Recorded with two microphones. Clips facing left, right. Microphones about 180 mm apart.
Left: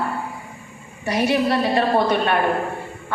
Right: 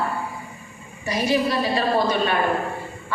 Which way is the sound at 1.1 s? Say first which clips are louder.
Left 2 dB; 60° left (ahead or behind).